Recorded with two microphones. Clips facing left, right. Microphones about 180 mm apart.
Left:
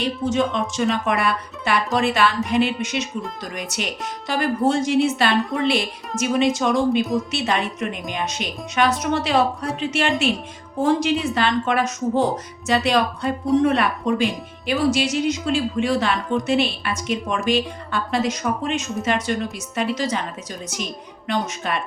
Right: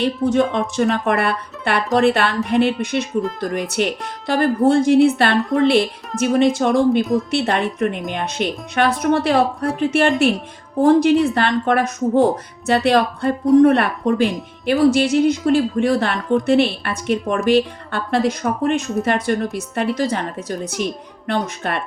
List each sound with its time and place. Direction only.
0.0 s speech: 60° right (ahead or behind)